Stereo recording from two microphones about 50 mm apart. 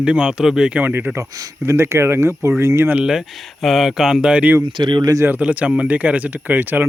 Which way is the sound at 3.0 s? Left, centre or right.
Centre.